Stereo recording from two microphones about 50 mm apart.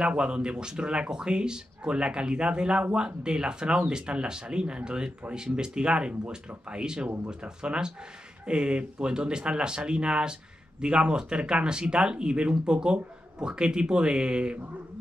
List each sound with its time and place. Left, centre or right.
0.0 s speech: centre